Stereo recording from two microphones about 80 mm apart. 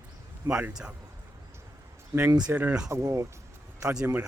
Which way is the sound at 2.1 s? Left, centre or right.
Right.